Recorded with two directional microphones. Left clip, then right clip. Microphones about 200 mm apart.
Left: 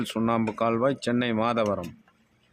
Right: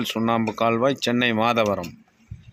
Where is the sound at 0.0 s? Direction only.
5° right (ahead or behind).